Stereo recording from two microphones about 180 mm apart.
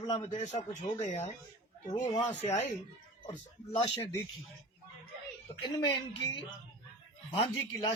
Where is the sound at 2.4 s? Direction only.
35° left (ahead or behind).